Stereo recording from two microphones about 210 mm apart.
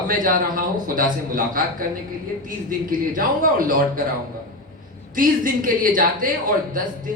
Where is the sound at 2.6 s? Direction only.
40° right (ahead or behind).